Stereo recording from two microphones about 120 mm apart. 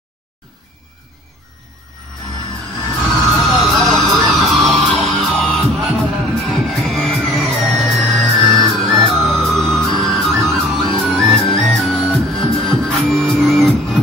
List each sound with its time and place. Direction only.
2.9 s music: centre (ahead or behind)